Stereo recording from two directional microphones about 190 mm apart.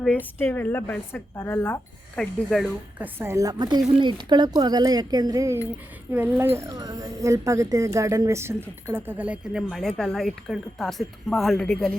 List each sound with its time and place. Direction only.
0.0 s speech: 10° left (ahead or behind)
3.2 s a woman's voice: 15° right (ahead or behind); by 11.9 s 5° left (ahead or behind)